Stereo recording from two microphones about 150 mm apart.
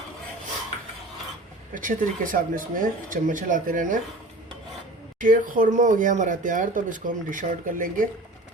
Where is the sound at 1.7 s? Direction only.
60° right (ahead or behind).